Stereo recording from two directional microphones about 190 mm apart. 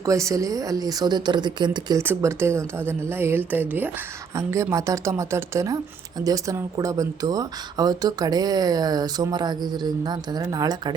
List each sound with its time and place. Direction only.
0.0 s a woman's voice: 15° right (ahead or behind)